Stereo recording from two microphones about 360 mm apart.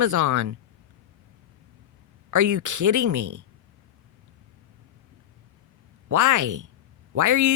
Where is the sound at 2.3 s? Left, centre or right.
Right.